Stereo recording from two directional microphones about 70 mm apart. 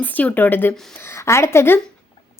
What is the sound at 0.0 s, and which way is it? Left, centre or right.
Speech, left.